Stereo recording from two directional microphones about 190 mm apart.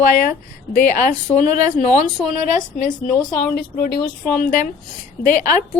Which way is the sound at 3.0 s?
45° left (ahead or behind).